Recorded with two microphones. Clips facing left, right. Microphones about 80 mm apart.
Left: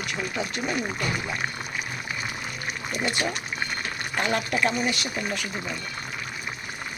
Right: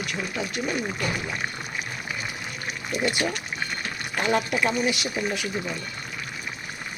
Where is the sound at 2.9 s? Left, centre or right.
Centre.